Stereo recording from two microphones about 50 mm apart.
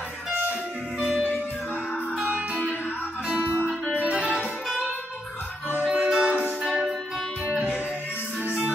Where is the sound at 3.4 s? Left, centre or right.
Left.